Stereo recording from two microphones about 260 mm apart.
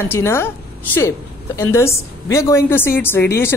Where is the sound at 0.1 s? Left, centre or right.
Centre.